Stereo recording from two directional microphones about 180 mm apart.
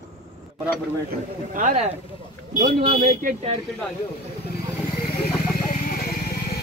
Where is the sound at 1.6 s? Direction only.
45° right (ahead or behind).